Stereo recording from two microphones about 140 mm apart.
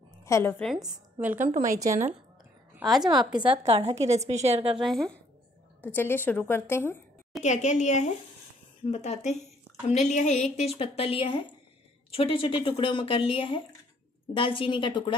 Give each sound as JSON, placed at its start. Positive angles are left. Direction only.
{"t": 0.2, "sound": "a woman's voice", "side_deg": 20}
{"t": 1.2, "sound": "a woman's voice", "side_deg": -15}
{"t": 4.7, "sound": "a woman's voice", "side_deg": 0}
{"t": 7.4, "sound": "a woman's voice", "side_deg": 60}